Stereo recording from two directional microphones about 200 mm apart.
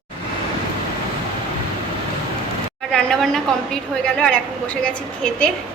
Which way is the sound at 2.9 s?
5° left (ahead or behind).